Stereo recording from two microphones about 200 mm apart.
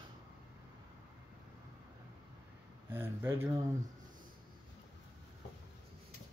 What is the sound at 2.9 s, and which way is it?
Speech, 10° right (ahead or behind).